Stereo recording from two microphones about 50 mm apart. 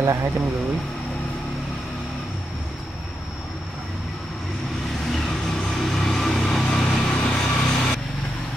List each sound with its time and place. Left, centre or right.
0.0 s speech: right
5.1 s vehicle: centre; by 7.9 s left